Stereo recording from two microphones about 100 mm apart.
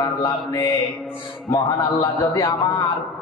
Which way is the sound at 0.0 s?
40° left (ahead or behind).